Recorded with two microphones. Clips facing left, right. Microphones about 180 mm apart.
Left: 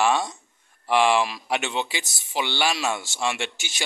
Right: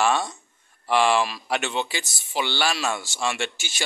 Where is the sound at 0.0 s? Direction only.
15° left (ahead or behind).